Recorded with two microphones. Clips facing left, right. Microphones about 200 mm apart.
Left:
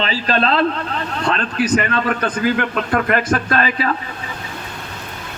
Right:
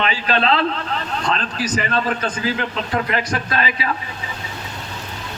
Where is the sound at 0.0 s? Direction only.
40° left (ahead or behind).